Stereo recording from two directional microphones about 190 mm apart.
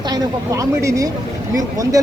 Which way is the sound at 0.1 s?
15° right (ahead or behind).